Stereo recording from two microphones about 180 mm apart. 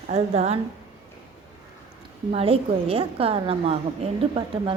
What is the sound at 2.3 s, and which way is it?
A woman's voice, 35° right (ahead or behind).